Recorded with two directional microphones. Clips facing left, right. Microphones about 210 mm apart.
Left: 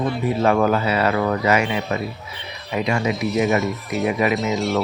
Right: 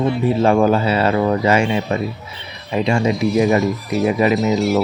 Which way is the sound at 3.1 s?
Centre (ahead or behind).